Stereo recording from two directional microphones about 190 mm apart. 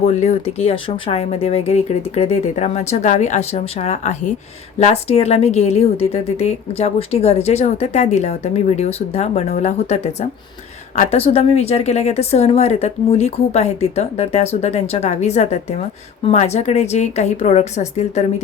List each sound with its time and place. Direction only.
0.0 s a woman's voice: 35° left (ahead or behind)